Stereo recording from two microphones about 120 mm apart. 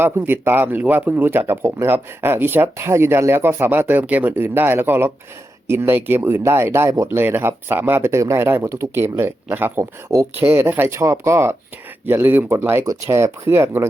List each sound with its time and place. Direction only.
0.0 s speech: 15° right (ahead or behind)